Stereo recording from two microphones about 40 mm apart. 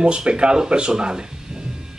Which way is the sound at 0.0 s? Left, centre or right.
Right.